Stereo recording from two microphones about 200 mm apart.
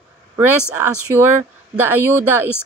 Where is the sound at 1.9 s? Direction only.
10° right (ahead or behind).